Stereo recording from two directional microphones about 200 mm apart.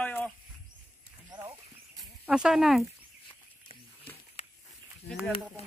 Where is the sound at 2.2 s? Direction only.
5° right (ahead or behind).